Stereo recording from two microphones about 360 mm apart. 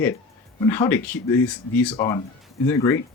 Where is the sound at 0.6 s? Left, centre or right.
Centre.